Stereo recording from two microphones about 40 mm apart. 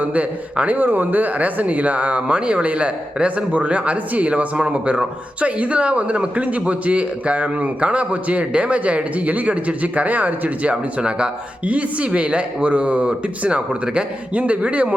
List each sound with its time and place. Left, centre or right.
0.0 s a man's voice: right
0.8 s a man's voice: right